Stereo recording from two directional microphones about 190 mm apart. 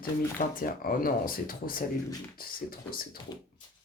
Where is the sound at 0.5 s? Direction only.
50° left (ahead or behind).